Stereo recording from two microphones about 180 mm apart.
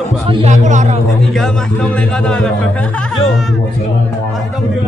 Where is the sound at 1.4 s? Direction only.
5° left (ahead or behind).